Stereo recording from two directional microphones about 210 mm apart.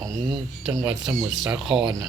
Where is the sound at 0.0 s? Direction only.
15° right (ahead or behind).